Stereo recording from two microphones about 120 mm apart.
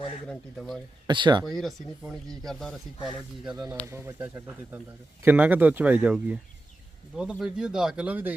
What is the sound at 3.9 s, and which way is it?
Speech, 20° right (ahead or behind).